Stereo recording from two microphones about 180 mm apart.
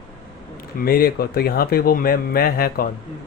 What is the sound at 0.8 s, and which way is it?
Speech, 55° left (ahead or behind).